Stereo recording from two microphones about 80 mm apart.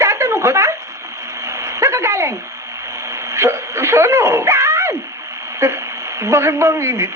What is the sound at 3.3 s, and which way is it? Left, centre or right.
A woman's voice, right.